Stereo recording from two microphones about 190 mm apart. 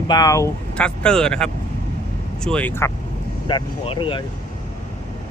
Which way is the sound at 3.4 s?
25° left (ahead or behind).